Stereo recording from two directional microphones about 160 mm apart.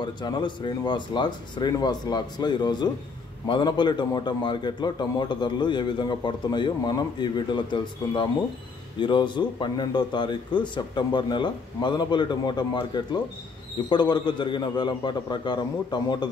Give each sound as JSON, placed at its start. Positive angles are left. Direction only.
{"t": 0.0, "sound": "a man's voice", "side_deg": 30}